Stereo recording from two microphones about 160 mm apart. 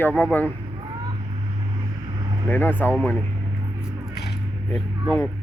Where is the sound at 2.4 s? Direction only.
10° left (ahead or behind).